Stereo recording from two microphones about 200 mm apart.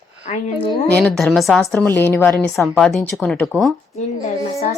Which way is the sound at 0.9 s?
5° left (ahead or behind).